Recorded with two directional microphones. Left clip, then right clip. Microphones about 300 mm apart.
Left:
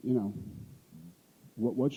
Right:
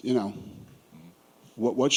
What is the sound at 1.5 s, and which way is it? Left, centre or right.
Speech, right.